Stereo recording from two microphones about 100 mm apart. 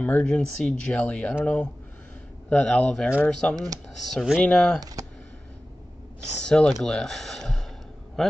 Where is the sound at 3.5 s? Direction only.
40° right (ahead or behind).